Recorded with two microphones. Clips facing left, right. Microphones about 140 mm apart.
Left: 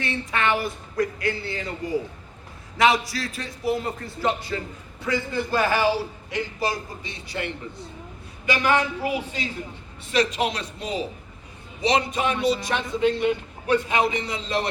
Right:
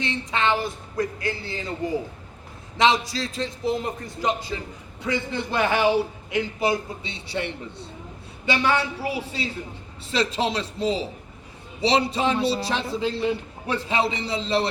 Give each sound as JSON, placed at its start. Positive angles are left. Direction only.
{"t": 0.0, "sound": "a man's voice", "side_deg": -20}